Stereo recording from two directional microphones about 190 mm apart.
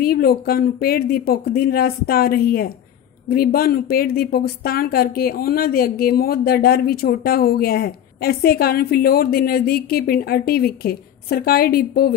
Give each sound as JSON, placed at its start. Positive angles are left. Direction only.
{"t": 0.0, "sound": "speech", "side_deg": 55}